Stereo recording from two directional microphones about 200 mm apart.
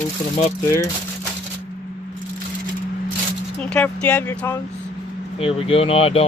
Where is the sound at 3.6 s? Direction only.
5° left (ahead or behind).